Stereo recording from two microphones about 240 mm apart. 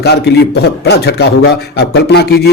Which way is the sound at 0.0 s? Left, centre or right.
Left.